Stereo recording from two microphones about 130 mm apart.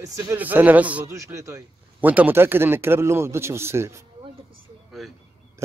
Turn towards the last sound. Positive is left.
turn(degrees=-20)  # may be behind; listen again after turning